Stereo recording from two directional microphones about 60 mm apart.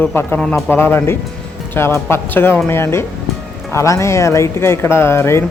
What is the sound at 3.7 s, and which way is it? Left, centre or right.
Speech, left.